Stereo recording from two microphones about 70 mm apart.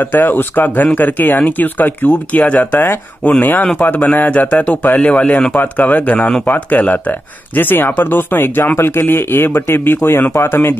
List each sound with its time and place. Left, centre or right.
0.0 s speech: left